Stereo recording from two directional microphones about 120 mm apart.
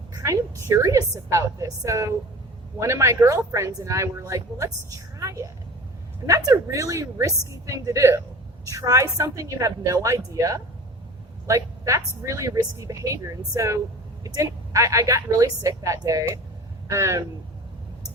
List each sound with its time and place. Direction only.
0.1 s a woman's voice: 25° right (ahead or behind)